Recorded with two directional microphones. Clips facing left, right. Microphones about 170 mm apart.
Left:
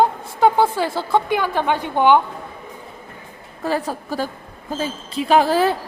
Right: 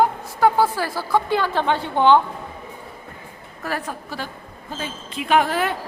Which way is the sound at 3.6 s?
25° left (ahead or behind).